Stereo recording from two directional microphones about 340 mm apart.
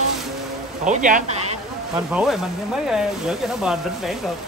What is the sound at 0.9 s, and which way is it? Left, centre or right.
Speech, right.